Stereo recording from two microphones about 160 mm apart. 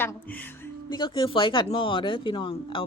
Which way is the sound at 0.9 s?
25° left (ahead or behind).